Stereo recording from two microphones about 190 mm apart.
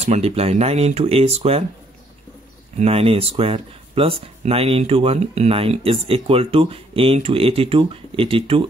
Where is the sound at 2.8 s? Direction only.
30° right (ahead or behind).